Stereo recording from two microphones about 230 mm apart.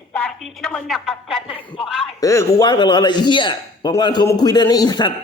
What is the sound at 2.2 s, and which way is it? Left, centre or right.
A man's voice, centre.